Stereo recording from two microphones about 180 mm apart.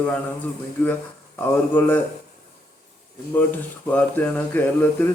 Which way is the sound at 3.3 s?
10° left (ahead or behind).